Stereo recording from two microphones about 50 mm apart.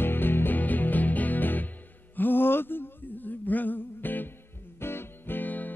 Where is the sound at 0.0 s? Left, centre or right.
Left.